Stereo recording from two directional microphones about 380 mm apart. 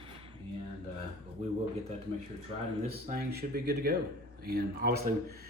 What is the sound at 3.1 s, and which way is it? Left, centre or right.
Speech, right.